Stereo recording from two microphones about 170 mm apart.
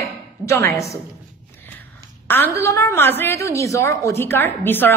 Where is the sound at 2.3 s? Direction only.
15° left (ahead or behind).